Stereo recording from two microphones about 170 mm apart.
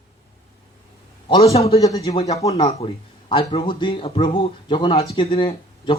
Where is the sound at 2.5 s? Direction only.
35° left (ahead or behind).